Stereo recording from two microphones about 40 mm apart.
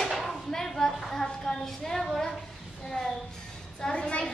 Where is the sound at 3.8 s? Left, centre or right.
Left.